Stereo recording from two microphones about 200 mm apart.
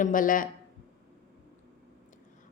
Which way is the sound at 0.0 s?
40° left (ahead or behind).